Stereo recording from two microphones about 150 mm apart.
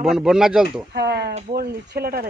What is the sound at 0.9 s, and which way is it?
Speech, 90° right.